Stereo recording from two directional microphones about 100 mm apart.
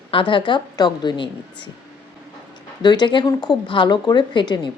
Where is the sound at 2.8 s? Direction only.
50° left (ahead or behind).